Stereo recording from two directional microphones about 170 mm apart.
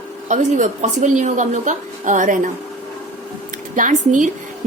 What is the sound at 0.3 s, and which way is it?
A woman's voice, 45° right (ahead or behind).